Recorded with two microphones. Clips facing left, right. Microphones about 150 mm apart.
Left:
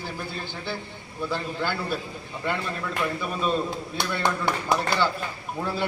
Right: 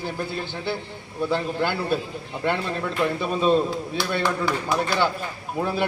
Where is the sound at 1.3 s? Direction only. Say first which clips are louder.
Right 4 dB; 20° right (ahead or behind).